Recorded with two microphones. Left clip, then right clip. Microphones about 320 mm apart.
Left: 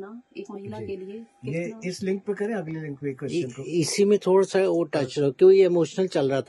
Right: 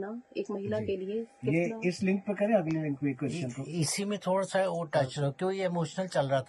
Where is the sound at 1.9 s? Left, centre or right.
Centre.